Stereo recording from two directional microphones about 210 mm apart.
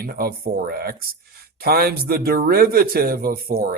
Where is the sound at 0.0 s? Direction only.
45° right (ahead or behind).